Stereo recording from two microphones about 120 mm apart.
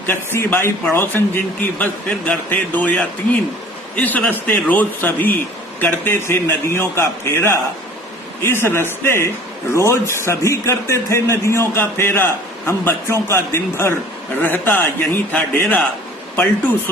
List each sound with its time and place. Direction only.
0.1 s a man's voice: 20° left (ahead or behind)